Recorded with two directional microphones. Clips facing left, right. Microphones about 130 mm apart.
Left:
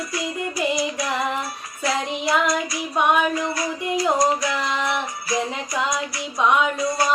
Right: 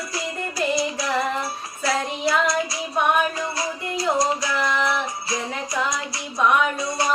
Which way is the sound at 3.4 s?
30° right (ahead or behind).